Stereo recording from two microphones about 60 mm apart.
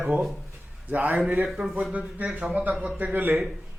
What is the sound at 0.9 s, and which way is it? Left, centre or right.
Speech, right.